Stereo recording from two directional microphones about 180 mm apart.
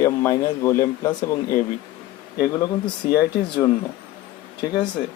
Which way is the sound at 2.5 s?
20° left (ahead or behind).